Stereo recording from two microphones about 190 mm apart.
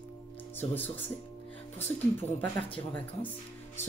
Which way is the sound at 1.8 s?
10° left (ahead or behind).